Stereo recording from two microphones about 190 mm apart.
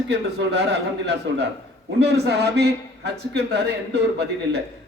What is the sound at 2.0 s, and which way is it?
A man's voice, 60° right (ahead or behind).